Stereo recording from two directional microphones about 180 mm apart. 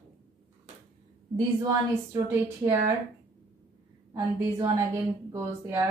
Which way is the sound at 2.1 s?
15° right (ahead or behind).